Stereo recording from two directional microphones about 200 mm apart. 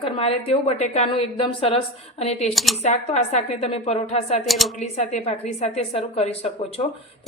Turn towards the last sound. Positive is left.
turn(degrees=30)  # may be behind; listen again after turning